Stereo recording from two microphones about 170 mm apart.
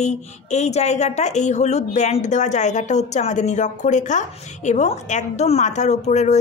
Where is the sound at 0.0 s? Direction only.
40° left (ahead or behind).